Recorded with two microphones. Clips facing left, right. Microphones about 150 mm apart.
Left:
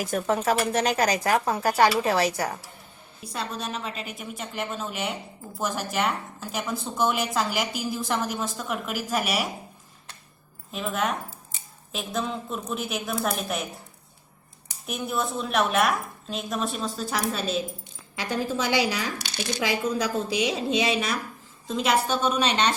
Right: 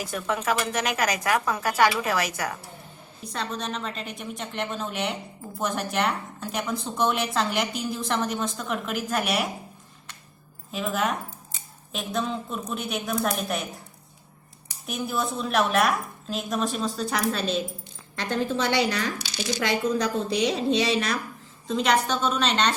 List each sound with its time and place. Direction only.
0.0 s speech: 45° left (ahead or behind)
0.3 s speech: 30° left (ahead or behind)
3.3 s speech: 5° left (ahead or behind)
10.7 s speech: centre (ahead or behind)
14.8 s a woman's voice: centre (ahead or behind)
19.2 s speech: 55° left (ahead or behind)
19.6 s a woman's voice: 10° left (ahead or behind)